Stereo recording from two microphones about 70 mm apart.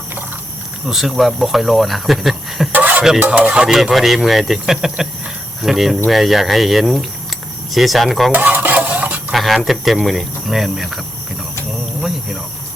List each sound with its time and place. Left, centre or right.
0.9 s speech: centre
2.7 s music: right
3.2 s speech: centre
8.3 s stir: right
9.3 s speech: centre